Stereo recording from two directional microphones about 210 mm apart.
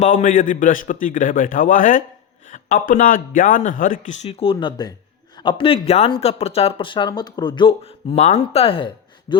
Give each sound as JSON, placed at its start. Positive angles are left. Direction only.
{"t": 0.0, "sound": "a man's voice", "side_deg": 40}